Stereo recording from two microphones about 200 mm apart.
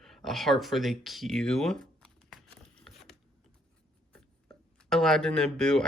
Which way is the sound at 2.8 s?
Centre (ahead or behind).